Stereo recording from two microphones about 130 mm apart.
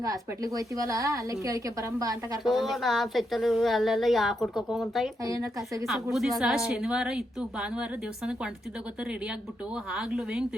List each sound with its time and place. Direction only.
0.0 s a woman's voice: 25° right (ahead or behind)
2.4 s a woman's voice: centre (ahead or behind)
5.2 s a woman's voice: 25° right (ahead or behind)
5.8 s a woman's voice: centre (ahead or behind)
10.0 s a woman's voice: 5° right (ahead or behind)